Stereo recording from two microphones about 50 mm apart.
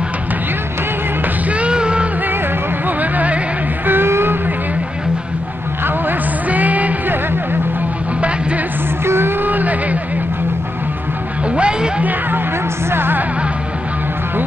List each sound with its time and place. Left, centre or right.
1.5 s music: right
3.0 s music: right
3.8 s music: right
6.5 s music: right
9.0 s a sound: right
9.4 s vehicle: right
11.4 s music: right
12.0 s music: right
12.9 s music: right